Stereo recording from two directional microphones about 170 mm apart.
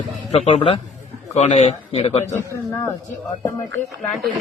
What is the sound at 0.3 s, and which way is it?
Speech, 35° left (ahead or behind).